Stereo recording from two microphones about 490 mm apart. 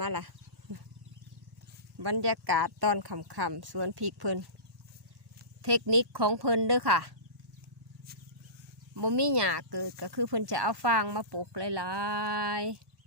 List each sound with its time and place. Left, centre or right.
0.0 s speech: right
2.0 s speech: right
5.8 s speech: right
9.0 s speech: right